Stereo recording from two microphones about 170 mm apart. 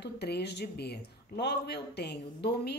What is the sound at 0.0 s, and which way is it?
A woman's voice, 75° left (ahead or behind).